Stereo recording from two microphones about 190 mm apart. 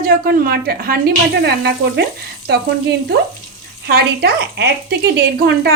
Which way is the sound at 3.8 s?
55° right (ahead or behind).